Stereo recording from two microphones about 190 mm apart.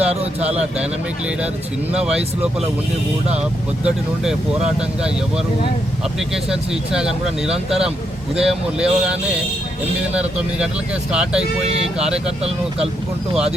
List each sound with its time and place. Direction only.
0.0 s speech: 35° right (ahead or behind)
2.0 s speech: 5° right (ahead or behind)
3.8 s speech: 5° right (ahead or behind)
6.1 s speech: 5° right (ahead or behind)
11.1 s speech: 5° right (ahead or behind)